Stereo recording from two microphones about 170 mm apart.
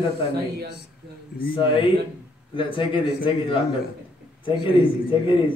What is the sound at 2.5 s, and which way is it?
Speech, 30° left (ahead or behind).